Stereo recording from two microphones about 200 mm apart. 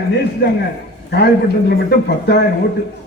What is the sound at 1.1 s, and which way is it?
A man's voice, 55° left (ahead or behind).